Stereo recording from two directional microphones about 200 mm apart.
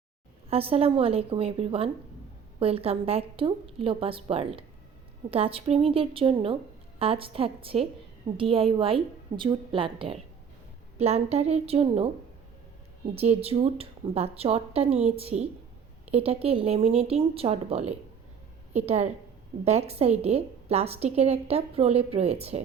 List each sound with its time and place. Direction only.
0.5 s a woman's voice: 30° right (ahead or behind)
13.1 s a woman's voice: 30° right (ahead or behind)